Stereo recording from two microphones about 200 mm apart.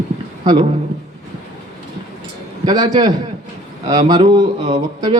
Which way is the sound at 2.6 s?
20° right (ahead or behind).